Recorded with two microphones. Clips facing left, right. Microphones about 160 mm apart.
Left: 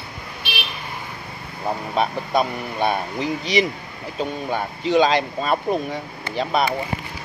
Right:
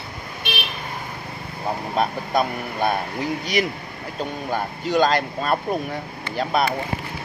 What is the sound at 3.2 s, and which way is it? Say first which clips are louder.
Speech: left 4 dB; 50° right (ahead or behind).